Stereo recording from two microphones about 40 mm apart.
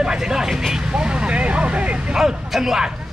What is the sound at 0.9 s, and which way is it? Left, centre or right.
Vehicle, right.